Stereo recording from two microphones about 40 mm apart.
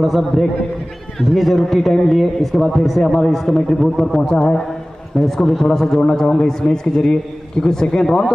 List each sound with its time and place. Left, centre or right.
0.0 s a man's voice: centre